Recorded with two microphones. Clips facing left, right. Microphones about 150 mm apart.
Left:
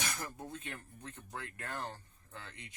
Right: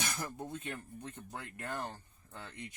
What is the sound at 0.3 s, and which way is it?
Speech, 15° right (ahead or behind).